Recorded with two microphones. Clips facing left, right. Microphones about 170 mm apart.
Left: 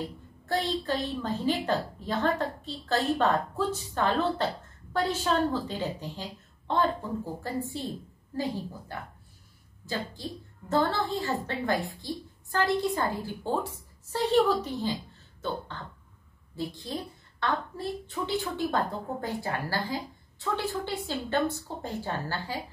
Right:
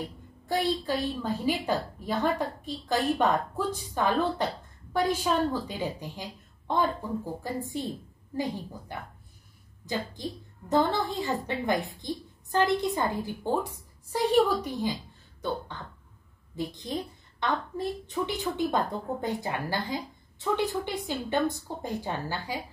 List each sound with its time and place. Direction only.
0.5 s a woman's voice: 10° right (ahead or behind)
10.2 s a woman's voice: 15° right (ahead or behind)
16.5 s a woman's voice: 20° right (ahead or behind)